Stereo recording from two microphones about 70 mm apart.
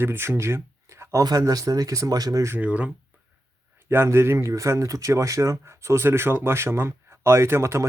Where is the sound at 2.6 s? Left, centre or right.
Centre.